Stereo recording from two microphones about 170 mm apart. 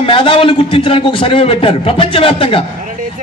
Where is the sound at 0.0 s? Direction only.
30° left (ahead or behind).